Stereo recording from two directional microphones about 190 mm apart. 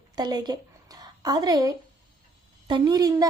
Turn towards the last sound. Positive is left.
turn(degrees=-20)  # may be behind; listen again after turning